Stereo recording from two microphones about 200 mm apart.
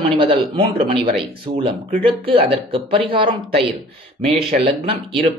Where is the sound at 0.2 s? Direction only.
25° right (ahead or behind).